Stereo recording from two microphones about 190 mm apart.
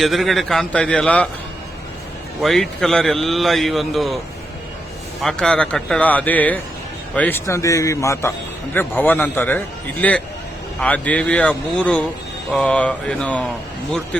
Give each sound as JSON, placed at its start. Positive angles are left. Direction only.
{"t": 0.0, "sound": "a man's voice", "side_deg": 0}
{"t": 2.4, "sound": "a man's voice", "side_deg": 0}
{"t": 5.2, "sound": "a man's voice", "side_deg": 5}